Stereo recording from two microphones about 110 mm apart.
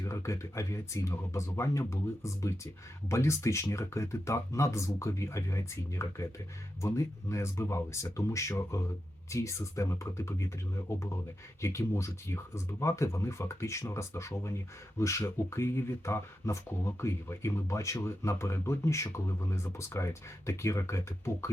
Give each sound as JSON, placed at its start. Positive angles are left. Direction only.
{"t": 0.0, "sound": "speech", "side_deg": 25}